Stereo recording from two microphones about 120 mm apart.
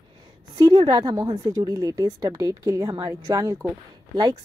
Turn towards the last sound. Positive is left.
turn(degrees=-30)  # may be behind; listen again after turning